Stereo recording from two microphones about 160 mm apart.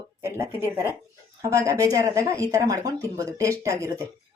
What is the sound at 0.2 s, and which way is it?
Speech, 15° right (ahead or behind).